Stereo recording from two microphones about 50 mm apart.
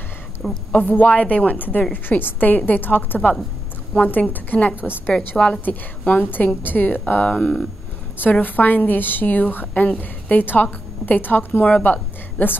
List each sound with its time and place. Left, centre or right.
0.4 s a woman's voice: centre
0.7 s a woman's voice: left
5.1 s a woman's voice: centre
5.5 s a woman's voice: left
7.3 s speech: centre
8.2 s a woman's voice: left